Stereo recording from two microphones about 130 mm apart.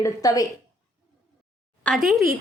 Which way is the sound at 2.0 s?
Centre (ahead or behind).